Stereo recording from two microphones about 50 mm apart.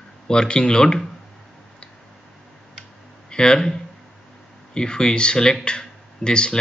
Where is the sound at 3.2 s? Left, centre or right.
Centre.